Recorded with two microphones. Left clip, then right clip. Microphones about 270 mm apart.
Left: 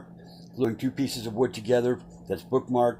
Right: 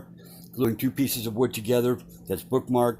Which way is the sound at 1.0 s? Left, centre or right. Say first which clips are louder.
Even; right.